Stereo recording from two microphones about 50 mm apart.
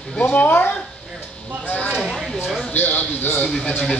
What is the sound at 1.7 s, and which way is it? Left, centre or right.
Speech, left.